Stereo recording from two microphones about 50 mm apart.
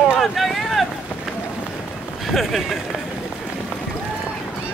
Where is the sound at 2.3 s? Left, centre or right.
Centre.